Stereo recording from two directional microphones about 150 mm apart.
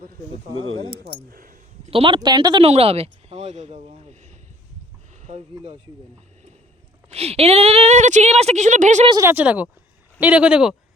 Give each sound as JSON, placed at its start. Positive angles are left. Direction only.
{"t": 1.3, "sound": "a sound", "side_deg": -70}
{"t": 1.9, "sound": "speech", "side_deg": -35}
{"t": 2.6, "sound": "speech", "side_deg": -45}
{"t": 7.1, "sound": "speech", "side_deg": -40}
{"t": 9.2, "sound": "speech", "side_deg": -10}